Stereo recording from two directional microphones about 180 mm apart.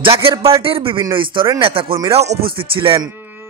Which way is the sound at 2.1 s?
35° right (ahead or behind).